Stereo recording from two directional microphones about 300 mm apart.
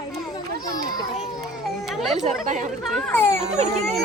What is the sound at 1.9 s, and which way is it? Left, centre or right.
Chatter, centre.